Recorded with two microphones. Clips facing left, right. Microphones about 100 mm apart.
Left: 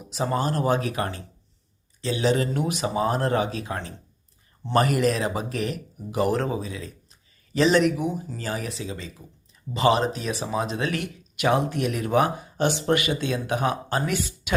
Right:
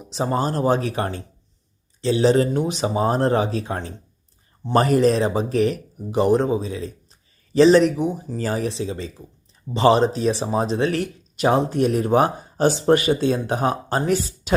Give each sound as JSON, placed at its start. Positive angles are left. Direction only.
{"t": 0.1, "sound": "speech", "side_deg": -30}